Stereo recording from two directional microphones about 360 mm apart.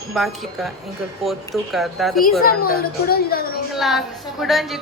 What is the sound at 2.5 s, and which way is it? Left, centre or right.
Speech, left.